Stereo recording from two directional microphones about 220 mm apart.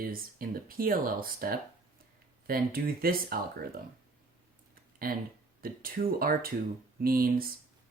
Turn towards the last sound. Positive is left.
turn(degrees=-40)  # may be behind; listen again after turning